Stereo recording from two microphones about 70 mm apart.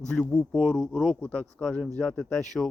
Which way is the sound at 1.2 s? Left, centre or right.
Centre.